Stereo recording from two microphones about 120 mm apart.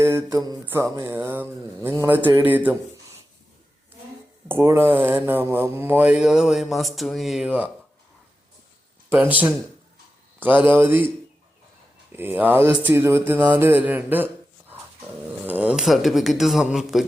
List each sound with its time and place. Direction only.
0.0 s mantra: 20° right (ahead or behind)
0.6 s speech: 20° right (ahead or behind)
4.4 s speech: 20° right (ahead or behind); by 7.4 s centre (ahead or behind)
7.4 s speech: 10° right (ahead or behind)
9.2 s speech: 15° right (ahead or behind)
12.1 s speech: 15° right (ahead or behind)
15.3 s dog: 15° right (ahead or behind)
15.8 s speech: centre (ahead or behind)